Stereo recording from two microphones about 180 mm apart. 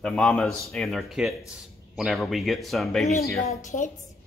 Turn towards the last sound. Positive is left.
turn(degrees=45)  # may be behind; listen again after turning